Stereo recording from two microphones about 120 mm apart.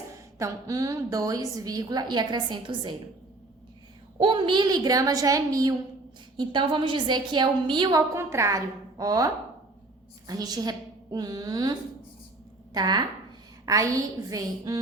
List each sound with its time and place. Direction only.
0.3 s a woman's voice: 25° right (ahead or behind)
4.2 s a woman's voice: 45° right (ahead or behind); by 5.7 s 30° right (ahead or behind)
6.3 s a woman's voice: 40° right (ahead or behind)
8.2 s a woman's voice: 20° right (ahead or behind)
12.7 s a woman's voice: 35° right (ahead or behind)